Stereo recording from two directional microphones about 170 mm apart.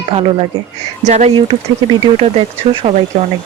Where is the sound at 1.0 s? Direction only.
40° right (ahead or behind).